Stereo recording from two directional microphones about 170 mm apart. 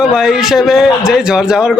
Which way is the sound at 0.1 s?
5° right (ahead or behind).